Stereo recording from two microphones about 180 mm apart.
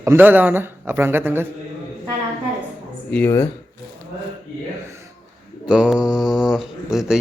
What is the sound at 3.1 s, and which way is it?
Speech, 10° left (ahead or behind).